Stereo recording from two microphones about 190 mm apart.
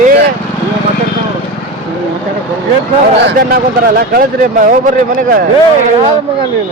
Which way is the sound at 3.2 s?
55° right (ahead or behind).